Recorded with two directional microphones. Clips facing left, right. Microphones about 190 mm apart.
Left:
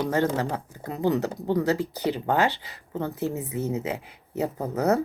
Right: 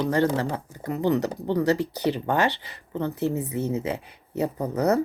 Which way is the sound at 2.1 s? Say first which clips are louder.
Even; 15° left (ahead or behind).